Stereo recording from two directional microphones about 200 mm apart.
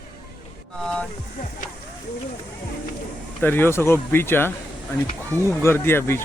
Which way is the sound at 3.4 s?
10° left (ahead or behind).